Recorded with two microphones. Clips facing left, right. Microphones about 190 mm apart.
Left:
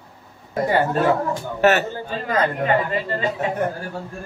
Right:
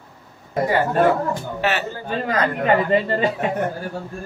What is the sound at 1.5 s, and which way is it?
Speech, 45° left (ahead or behind).